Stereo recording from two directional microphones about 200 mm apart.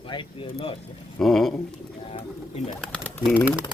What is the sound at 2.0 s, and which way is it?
Bird, 30° left (ahead or behind).